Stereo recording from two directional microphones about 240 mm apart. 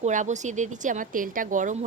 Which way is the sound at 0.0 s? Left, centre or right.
Right.